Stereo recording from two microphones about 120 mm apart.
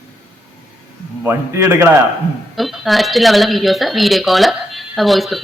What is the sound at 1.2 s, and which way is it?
Speech, 20° right (ahead or behind).